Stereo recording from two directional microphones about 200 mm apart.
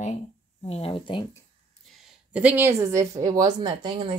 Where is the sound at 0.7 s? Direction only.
30° left (ahead or behind).